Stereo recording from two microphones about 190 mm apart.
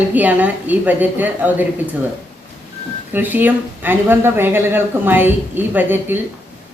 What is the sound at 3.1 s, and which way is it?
Speech, 10° right (ahead or behind).